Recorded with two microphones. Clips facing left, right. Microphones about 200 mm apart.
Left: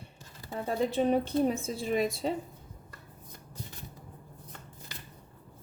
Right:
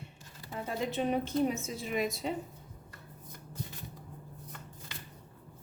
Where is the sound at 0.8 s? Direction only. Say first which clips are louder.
Left 5 dB; 35° left (ahead or behind).